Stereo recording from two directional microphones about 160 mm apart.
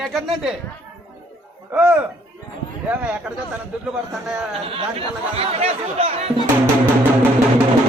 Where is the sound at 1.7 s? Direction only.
10° right (ahead or behind).